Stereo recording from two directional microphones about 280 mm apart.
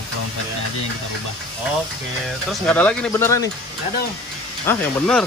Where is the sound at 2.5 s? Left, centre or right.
Centre.